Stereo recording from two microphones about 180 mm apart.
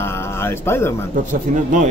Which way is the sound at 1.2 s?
45° right (ahead or behind).